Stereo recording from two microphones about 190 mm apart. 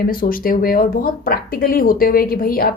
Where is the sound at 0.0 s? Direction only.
50° left (ahead or behind).